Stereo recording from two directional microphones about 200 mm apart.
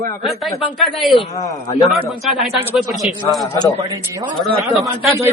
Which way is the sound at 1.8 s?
Centre (ahead or behind).